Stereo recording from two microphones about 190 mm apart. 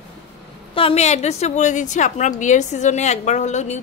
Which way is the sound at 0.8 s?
30° left (ahead or behind).